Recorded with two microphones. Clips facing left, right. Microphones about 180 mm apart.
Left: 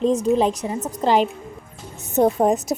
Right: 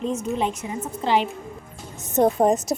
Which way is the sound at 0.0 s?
35° left (ahead or behind).